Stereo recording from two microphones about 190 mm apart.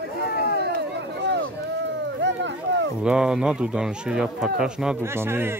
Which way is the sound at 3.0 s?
5° right (ahead or behind).